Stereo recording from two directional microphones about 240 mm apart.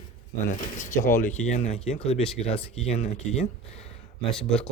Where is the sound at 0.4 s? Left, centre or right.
Left.